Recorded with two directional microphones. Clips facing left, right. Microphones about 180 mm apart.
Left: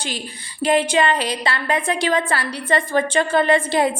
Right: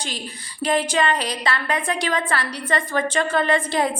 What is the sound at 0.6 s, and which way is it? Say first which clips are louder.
A woman's voice: left 3 dB; 25° left (ahead or behind).